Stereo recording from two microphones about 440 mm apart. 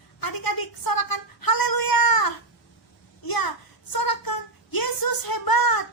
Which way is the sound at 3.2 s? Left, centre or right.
Left.